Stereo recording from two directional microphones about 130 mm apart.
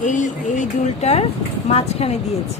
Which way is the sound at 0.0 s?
70° left (ahead or behind).